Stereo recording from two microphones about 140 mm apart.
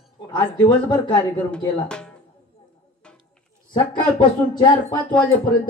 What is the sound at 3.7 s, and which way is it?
Speech, 35° left (ahead or behind).